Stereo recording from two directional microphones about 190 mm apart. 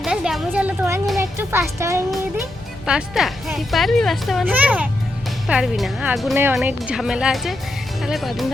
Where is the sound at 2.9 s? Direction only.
5° right (ahead or behind).